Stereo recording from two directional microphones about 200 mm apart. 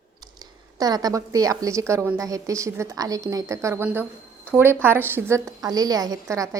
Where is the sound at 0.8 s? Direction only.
20° right (ahead or behind).